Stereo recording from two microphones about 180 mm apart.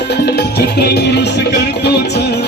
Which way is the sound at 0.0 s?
65° left (ahead or behind).